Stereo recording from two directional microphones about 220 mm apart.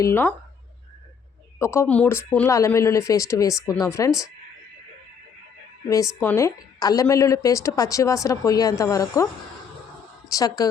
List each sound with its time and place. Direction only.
0.0 s a woman's voice: 10° left (ahead or behind)
1.5 s a woman's voice: 10° left (ahead or behind)
6.1 s a woman's voice: 5° left (ahead or behind)